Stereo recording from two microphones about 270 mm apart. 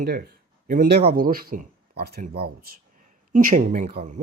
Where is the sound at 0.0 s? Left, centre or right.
Right.